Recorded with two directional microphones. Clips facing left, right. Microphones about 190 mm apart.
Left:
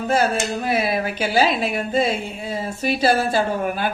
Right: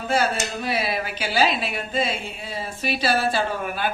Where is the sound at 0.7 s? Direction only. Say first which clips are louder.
Left 4 dB; 50° left (ahead or behind).